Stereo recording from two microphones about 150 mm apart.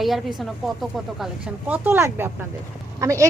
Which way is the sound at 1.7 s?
15° right (ahead or behind).